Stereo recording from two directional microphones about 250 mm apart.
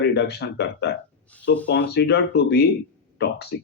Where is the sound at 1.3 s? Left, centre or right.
Centre.